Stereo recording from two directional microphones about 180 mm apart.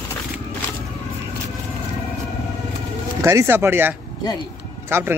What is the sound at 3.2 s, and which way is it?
Speech, 15° right (ahead or behind).